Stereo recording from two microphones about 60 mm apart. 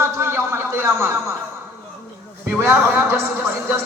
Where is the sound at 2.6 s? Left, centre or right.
Right.